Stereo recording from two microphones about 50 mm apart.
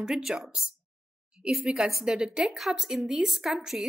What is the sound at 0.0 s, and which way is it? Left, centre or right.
Speech, centre.